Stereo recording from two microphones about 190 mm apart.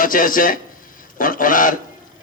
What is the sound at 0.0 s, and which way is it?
A man's voice, 45° left (ahead or behind).